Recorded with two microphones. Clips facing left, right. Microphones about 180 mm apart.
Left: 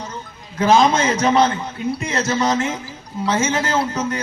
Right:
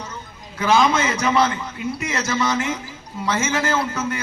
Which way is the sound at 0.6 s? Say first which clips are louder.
Left 3 dB; 35° left (ahead or behind).